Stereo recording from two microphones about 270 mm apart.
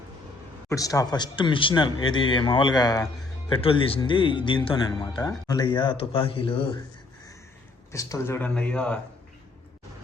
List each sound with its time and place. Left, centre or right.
0.7 s a man's voice: centre
7.9 s speech: centre